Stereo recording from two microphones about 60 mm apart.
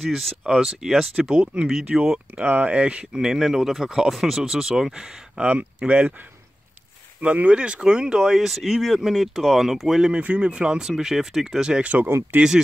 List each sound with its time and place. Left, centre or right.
0.0 s speech: centre
1.1 s speech: centre
2.3 s speech: right; by 5.0 s centre
5.4 s speech: right
7.2 s speech: right; by 10.1 s centre
10.1 s speech: right